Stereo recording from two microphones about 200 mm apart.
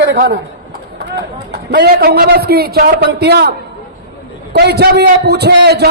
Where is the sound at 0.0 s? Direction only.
55° right (ahead or behind).